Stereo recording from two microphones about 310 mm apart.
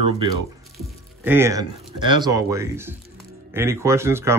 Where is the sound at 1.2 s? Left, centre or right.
Centre.